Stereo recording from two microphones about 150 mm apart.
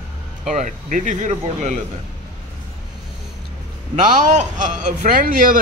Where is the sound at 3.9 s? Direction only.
55° right (ahead or behind).